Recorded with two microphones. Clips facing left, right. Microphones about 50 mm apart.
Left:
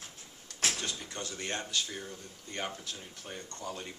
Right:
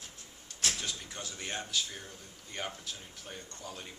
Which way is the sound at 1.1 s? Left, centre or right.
Centre.